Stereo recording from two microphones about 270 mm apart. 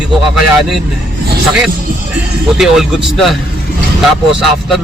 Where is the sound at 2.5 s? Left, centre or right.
Centre.